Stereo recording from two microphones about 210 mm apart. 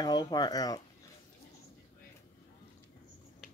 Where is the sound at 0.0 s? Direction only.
20° left (ahead or behind).